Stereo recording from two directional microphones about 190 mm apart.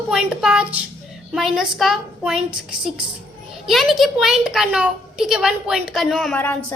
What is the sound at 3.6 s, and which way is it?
A woman's voice, centre (ahead or behind).